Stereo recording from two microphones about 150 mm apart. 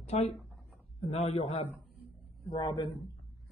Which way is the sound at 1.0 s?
45° left (ahead or behind).